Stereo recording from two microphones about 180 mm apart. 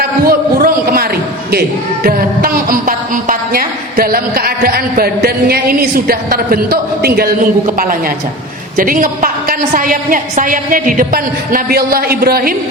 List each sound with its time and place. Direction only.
0.3 s a sound: 55° right (ahead or behind)
2.0 s a woman's voice: 55° right (ahead or behind)
8.7 s a woman's voice: 50° right (ahead or behind)